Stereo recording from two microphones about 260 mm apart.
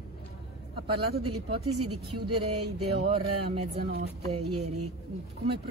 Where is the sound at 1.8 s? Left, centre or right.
Right.